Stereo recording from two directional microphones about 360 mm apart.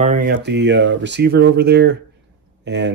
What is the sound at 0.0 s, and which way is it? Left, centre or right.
Speech, right.